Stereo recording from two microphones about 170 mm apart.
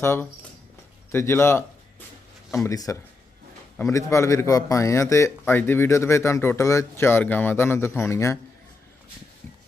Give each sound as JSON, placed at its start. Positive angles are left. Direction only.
{"t": 0.0, "sound": "speech", "side_deg": 10}
{"t": 2.6, "sound": "speech", "side_deg": 20}